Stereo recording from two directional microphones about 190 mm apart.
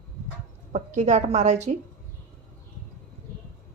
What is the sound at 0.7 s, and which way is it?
A woman's voice, 40° right (ahead or behind).